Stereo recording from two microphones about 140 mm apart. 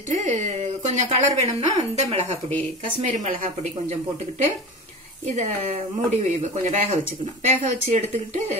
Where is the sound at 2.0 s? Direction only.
50° right (ahead or behind).